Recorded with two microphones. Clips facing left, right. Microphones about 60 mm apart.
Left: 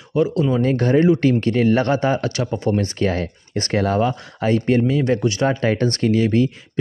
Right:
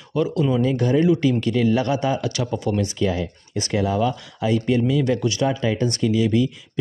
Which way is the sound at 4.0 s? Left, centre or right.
Left.